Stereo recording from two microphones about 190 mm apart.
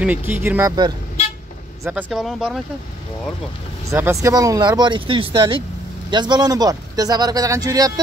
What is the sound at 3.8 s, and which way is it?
Speech, 15° right (ahead or behind).